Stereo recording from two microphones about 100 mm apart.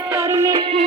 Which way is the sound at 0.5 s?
75° right (ahead or behind).